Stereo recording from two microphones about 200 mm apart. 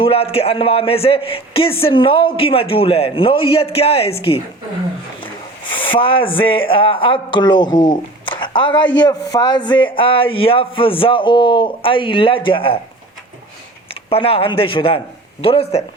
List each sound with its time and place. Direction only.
0.0 s a man's voice: 30° left (ahead or behind)
5.8 s a man's voice: 25° left (ahead or behind)
14.1 s a man's voice: 25° left (ahead or behind)